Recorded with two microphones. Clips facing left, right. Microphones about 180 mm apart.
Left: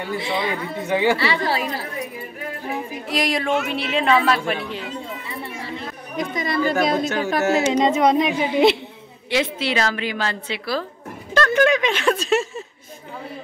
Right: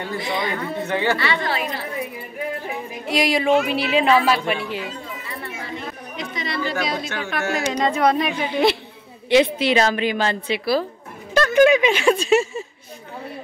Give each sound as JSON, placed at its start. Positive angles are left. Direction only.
{"t": 0.2, "sound": "speech", "side_deg": 25}
{"t": 0.8, "sound": "speech", "side_deg": 15}
{"t": 1.1, "sound": "a woman's voice", "side_deg": 30}
{"t": 3.1, "sound": "speech", "side_deg": 0}
{"t": 5.4, "sound": "chatter", "side_deg": 30}
{"t": 6.1, "sound": "a woman's voice", "side_deg": 45}
{"t": 7.4, "sound": "speech", "side_deg": 25}
{"t": 9.3, "sound": "a woman's voice", "side_deg": -20}